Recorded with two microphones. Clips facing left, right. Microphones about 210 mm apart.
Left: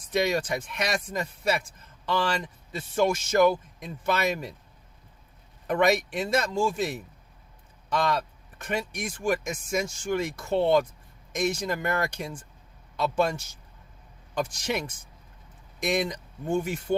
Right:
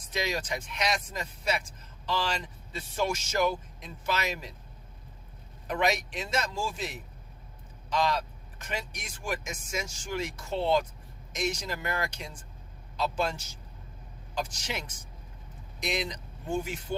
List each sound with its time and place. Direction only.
0.1 s speech: 55° left (ahead or behind)
5.6 s speech: 55° left (ahead or behind)
14.3 s speech: 60° left (ahead or behind)